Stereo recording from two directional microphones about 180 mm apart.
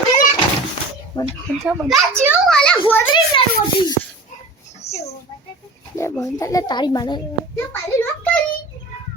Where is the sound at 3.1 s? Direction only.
25° left (ahead or behind).